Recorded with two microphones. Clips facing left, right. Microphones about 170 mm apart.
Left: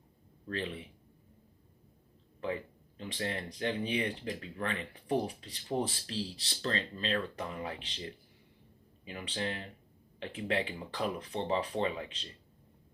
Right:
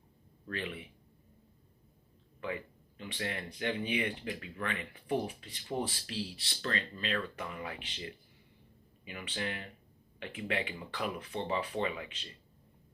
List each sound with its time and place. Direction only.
0.5 s speech: 30° left (ahead or behind)
3.0 s speech: 35° left (ahead or behind)